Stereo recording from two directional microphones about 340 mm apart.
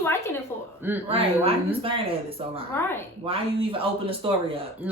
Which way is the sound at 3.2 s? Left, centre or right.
Centre.